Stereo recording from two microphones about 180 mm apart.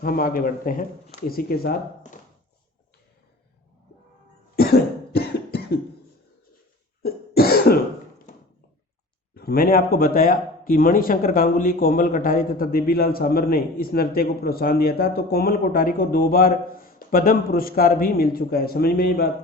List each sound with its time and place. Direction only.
0.0 s a man's voice: 55° left (ahead or behind)
4.5 s cough: 60° left (ahead or behind)
7.0 s cough: 60° left (ahead or behind)
9.3 s speech: 60° left (ahead or behind)